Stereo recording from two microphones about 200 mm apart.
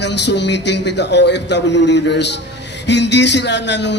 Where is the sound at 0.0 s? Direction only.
60° left (ahead or behind).